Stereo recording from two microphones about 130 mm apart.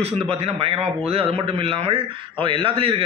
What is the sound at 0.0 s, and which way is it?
A man's voice, 50° right (ahead or behind).